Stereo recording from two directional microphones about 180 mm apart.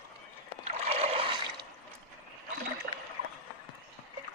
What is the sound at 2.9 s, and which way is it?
Rowboat, 60° right (ahead or behind).